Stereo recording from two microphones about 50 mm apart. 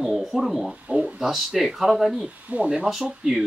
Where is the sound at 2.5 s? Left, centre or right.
Right.